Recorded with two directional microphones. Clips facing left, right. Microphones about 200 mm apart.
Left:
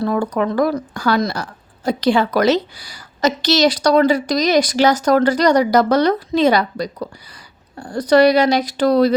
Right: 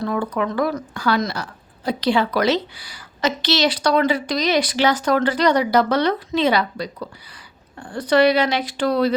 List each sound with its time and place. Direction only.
0.0 s speech: 40° left (ahead or behind)